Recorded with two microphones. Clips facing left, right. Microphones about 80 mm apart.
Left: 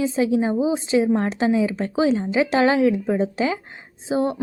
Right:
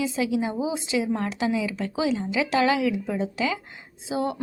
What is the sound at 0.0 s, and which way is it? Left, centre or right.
A woman's voice, left.